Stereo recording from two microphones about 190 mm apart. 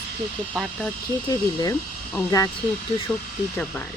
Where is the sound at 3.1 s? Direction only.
10° left (ahead or behind).